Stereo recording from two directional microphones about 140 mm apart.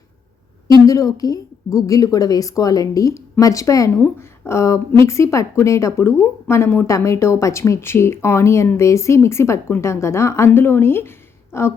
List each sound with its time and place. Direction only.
0.9 s speech: 25° left (ahead or behind)